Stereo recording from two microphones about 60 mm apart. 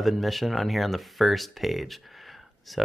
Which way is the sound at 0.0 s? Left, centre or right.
Centre.